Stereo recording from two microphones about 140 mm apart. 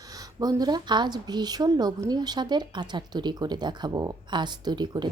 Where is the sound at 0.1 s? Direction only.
25° right (ahead or behind).